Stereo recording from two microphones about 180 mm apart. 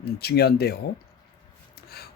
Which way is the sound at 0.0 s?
60° left (ahead or behind).